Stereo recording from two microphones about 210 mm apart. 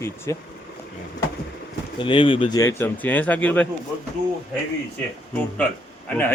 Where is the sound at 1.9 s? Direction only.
25° left (ahead or behind); by 3.6 s 5° left (ahead or behind).